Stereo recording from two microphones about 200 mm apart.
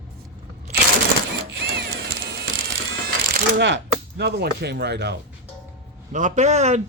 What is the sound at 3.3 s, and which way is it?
Speech, 65° right (ahead or behind).